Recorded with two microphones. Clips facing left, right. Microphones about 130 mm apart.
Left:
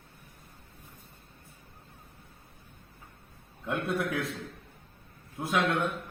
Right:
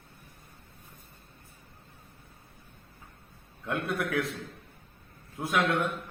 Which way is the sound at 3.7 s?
25° left (ahead or behind).